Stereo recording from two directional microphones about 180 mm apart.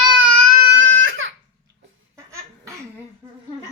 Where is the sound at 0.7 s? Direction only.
90° right.